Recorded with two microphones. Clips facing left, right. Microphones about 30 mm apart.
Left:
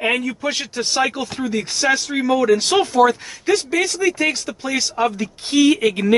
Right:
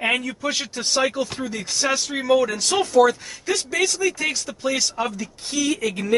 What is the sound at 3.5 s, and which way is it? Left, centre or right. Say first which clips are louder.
Speech: left 4 dB; left.